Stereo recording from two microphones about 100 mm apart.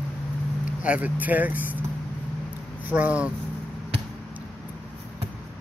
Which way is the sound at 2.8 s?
15° right (ahead or behind).